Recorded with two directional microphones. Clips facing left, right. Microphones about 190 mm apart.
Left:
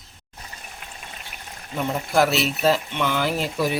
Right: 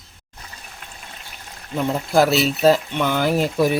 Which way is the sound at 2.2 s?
35° right (ahead or behind).